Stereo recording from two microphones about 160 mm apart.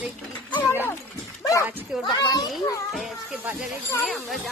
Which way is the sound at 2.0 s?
25° left (ahead or behind).